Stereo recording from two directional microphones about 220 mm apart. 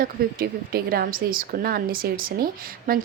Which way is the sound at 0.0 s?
40° right (ahead or behind).